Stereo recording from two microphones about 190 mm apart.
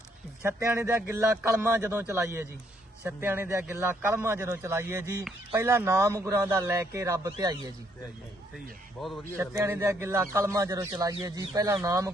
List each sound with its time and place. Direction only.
0.4 s a man's voice: 10° right (ahead or behind)
9.4 s a man's voice: 15° right (ahead or behind)